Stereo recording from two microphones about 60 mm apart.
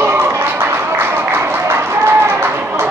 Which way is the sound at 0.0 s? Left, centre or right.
Right.